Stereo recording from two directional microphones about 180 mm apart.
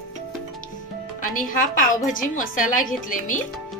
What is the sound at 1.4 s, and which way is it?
A woman's voice, 50° left (ahead or behind).